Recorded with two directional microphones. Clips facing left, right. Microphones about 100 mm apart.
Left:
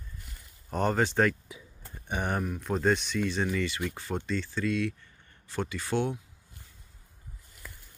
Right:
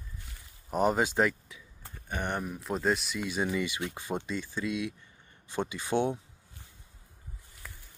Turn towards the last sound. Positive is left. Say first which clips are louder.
# right 1 dB
turn(degrees=-20)  # may be behind; listen again after turning